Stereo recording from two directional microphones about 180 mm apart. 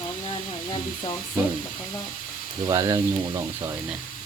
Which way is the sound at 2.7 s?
20° right (ahead or behind).